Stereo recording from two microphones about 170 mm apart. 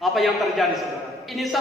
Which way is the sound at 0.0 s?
Centre (ahead or behind).